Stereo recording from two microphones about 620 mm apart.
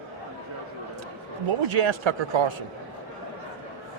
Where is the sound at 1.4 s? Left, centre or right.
Right.